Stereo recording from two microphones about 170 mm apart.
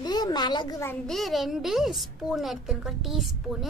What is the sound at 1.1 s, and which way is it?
A woman's voice, centre (ahead or behind).